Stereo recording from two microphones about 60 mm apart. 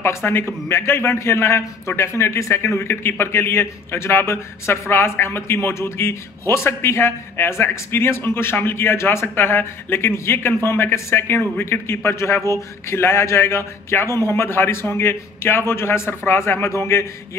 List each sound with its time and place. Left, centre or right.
0.0 s a man's voice: left